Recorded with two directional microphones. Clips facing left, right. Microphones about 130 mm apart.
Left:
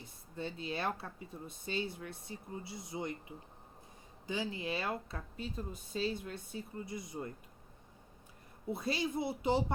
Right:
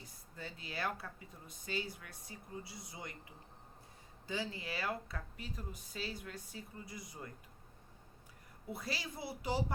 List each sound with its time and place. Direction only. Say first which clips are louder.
0.0 s speech: left 7 dB; 25° left (ahead or behind)
8.7 s speech: left 8 dB; 25° left (ahead or behind)